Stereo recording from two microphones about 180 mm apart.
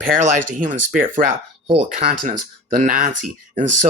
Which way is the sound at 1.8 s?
45° right (ahead or behind).